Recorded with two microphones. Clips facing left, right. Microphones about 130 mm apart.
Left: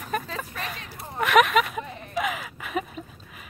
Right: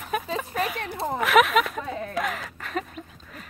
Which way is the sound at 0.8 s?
90° right.